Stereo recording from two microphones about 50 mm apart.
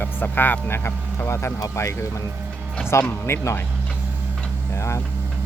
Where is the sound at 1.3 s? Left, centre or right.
Left.